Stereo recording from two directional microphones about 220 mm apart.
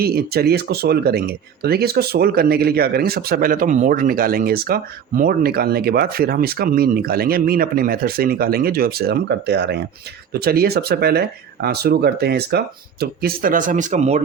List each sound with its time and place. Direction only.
0.0 s speech: 45° right (ahead or behind)